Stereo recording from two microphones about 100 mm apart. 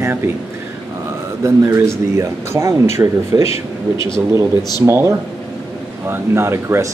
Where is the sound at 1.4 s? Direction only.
30° right (ahead or behind).